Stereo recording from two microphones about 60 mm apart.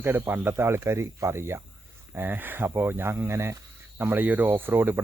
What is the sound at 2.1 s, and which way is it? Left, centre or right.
Speech, right.